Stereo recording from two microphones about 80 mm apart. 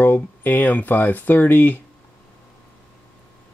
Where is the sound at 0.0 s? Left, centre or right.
Left.